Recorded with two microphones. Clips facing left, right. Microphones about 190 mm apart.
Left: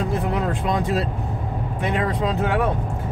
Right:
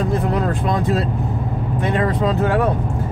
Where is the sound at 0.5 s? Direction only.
15° left (ahead or behind).